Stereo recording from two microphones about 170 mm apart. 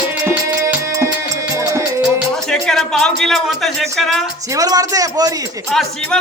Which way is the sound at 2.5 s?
5° left (ahead or behind).